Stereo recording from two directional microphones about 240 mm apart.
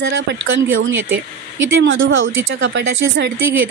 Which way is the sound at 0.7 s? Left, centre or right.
Right.